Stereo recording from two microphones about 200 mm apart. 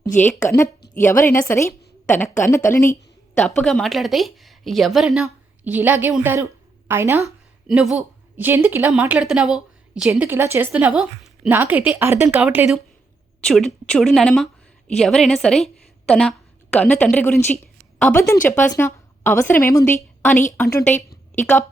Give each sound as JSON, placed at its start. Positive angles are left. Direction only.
{"t": 0.4, "sound": "a woman's voice", "side_deg": 15}
{"t": 20.9, "sound": "a woman's voice", "side_deg": 35}